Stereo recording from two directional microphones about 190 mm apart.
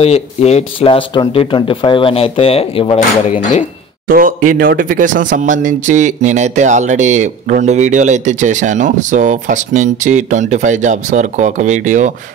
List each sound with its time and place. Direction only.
0.0 s speech: 35° left (ahead or behind)
4.1 s speech: 45° right (ahead or behind)